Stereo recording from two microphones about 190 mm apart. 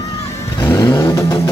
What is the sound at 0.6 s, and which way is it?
Vehicle, 15° left (ahead or behind).